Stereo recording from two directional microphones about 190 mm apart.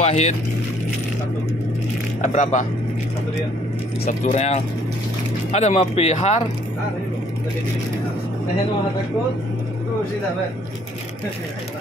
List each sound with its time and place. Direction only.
0.0 s speech: 35° left (ahead or behind)
2.2 s speech: 40° left (ahead or behind)
4.2 s speech: 40° left (ahead or behind)